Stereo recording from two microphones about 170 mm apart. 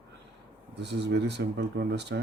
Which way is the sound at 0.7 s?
90° right.